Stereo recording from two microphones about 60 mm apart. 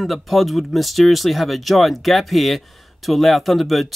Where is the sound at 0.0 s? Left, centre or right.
Centre.